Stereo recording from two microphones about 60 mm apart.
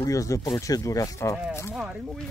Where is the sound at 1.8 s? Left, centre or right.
Centre.